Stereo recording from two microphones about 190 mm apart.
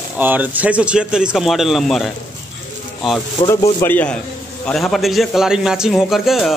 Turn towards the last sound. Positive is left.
turn(degrees=0)  # may be behind; listen again after turning